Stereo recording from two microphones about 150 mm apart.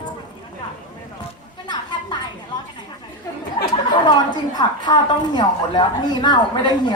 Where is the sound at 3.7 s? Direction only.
30° left (ahead or behind).